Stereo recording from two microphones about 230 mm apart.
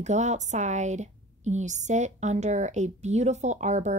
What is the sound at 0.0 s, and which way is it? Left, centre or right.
A woman's voice, right.